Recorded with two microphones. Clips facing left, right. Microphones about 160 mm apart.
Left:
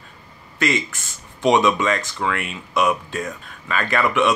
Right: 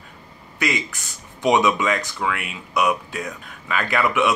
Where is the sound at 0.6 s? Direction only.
15° right (ahead or behind).